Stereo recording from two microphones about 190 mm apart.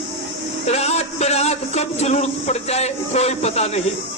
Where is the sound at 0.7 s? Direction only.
35° left (ahead or behind).